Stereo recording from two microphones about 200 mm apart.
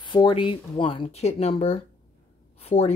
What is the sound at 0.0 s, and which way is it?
Speech, 25° left (ahead or behind).